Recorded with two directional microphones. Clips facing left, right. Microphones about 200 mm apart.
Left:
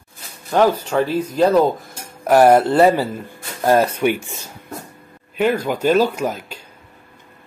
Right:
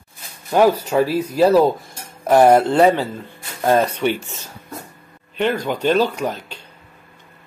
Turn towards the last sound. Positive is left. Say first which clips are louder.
# left 1 dB
turn(degrees=10)  # may be behind; listen again after turning